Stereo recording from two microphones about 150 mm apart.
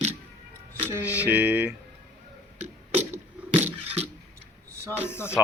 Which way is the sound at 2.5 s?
45° right (ahead or behind).